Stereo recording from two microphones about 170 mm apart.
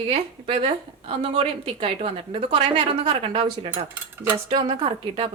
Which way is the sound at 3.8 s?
10° right (ahead or behind).